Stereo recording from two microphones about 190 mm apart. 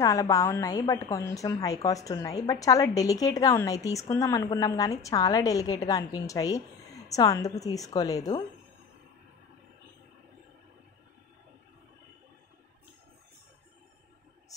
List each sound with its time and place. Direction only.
0.0 s a woman's voice: 20° left (ahead or behind)